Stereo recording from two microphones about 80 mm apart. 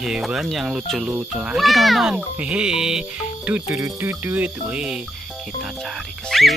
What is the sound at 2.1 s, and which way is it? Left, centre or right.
Speech, centre.